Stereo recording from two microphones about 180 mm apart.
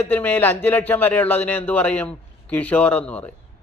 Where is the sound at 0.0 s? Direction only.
10° left (ahead or behind).